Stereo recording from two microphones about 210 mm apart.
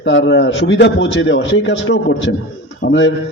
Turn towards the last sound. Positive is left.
turn(degrees=60)  # may be behind; listen again after turning